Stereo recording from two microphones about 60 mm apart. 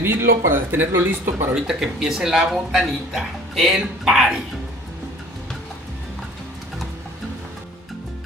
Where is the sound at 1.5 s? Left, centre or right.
Centre.